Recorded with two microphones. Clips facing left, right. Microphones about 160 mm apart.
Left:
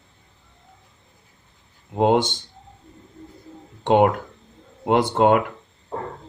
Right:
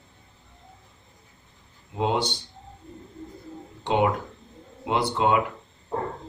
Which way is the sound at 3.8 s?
55° left (ahead or behind).